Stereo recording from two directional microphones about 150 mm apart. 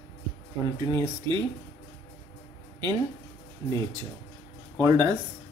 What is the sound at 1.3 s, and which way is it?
Speech, 30° right (ahead or behind).